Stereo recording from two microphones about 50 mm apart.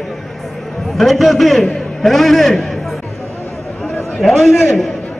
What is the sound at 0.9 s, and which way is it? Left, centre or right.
A man's voice, centre.